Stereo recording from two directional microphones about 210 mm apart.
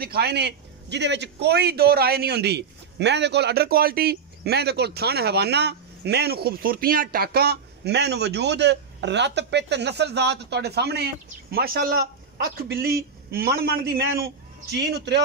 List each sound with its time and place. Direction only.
0.0 s a man's voice: 50° right (ahead or behind)